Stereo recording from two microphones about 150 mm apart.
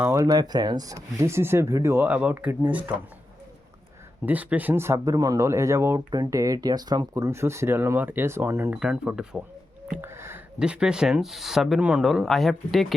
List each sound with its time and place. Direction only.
0.0 s speech: 20° right (ahead or behind)
4.3 s speech: 10° right (ahead or behind)
8.8 s speech: 5° right (ahead or behind)
10.0 s a sound: 15° right (ahead or behind)
10.6 s speech: 5° right (ahead or behind)